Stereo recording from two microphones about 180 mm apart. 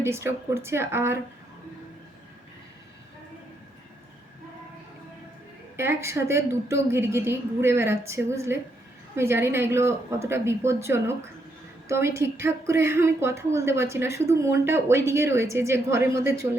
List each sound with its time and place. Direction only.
0.0 s a woman's voice: 15° right (ahead or behind)
5.7 s a woman's voice: 15° right (ahead or behind)